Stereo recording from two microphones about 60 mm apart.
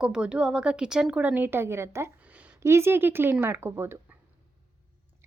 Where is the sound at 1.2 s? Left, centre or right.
Right.